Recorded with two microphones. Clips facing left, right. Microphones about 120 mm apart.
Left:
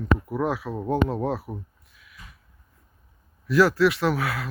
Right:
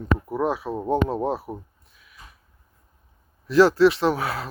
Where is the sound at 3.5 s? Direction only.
25° right (ahead or behind).